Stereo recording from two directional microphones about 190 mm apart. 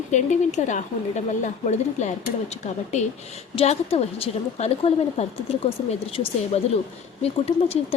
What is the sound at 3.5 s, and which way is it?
Speech, 30° left (ahead or behind).